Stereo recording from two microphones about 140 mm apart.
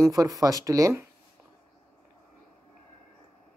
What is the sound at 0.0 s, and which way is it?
Speech, 25° right (ahead or behind).